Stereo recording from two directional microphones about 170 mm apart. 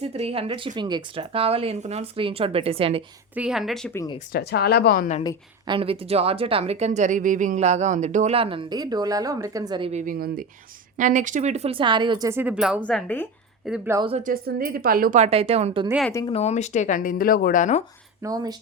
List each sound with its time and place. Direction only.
0.0 s a woman's voice: 35° right (ahead or behind)
3.3 s speech: 5° right (ahead or behind)
3.9 s speech: 20° left (ahead or behind)
4.3 s speech: 70° left (ahead or behind)
5.6 s a woman's voice: 30° right (ahead or behind)
9.9 s a woman's voice: 55° right (ahead or behind); by 12.3 s 25° right (ahead or behind)
12.3 s speech: 10° right (ahead or behind)
13.7 s speech: 5° right (ahead or behind)
14.3 s a woman's voice: 60° right (ahead or behind)
15.2 s a woman's voice: 35° right (ahead or behind)
16.3 s speech: 40° left (ahead or behind)
18.2 s speech: 20° right (ahead or behind)